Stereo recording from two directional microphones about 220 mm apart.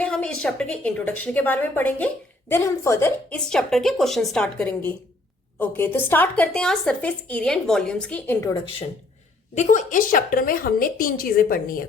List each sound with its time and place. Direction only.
0.0 s a woman's voice: 5° left (ahead or behind)
9.6 s a woman's voice: 35° left (ahead or behind)